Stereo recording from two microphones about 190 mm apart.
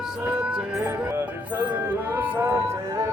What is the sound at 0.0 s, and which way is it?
Music, 5° right (ahead or behind).